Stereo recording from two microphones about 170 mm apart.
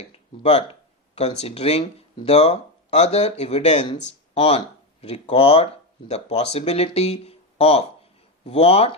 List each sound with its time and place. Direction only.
0.4 s speech: 35° left (ahead or behind)